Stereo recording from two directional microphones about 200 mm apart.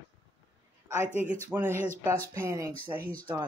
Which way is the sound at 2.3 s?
15° right (ahead or behind).